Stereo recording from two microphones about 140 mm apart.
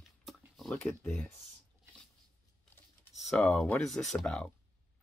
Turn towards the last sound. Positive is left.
turn(degrees=5)  # may be behind; listen again after turning